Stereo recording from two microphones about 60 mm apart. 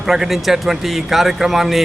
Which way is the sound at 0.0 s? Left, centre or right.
Centre.